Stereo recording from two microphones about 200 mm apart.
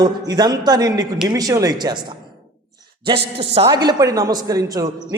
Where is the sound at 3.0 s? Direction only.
25° right (ahead or behind).